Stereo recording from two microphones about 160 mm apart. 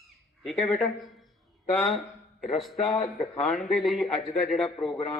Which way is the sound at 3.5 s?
Centre (ahead or behind).